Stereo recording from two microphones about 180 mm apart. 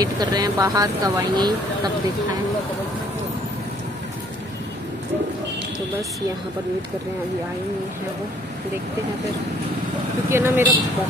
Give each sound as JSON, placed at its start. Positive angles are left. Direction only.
{"t": 0.0, "sound": "speech", "side_deg": -20}
{"t": 10.3, "sound": "speech", "side_deg": -15}